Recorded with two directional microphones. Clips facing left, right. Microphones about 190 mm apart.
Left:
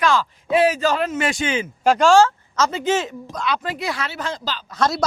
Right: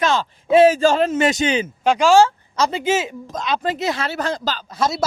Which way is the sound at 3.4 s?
20° right (ahead or behind).